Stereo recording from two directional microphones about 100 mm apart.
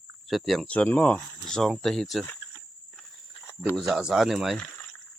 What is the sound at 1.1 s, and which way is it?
Speech, 5° left (ahead or behind).